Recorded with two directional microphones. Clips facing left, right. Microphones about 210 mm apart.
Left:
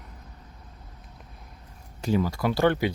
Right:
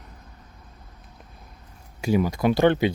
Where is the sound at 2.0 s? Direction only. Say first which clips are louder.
Right 4 dB; 15° right (ahead or behind).